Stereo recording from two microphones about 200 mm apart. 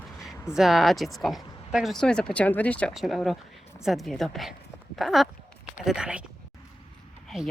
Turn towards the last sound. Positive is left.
turn(degrees=0)  # may be behind; listen again after turning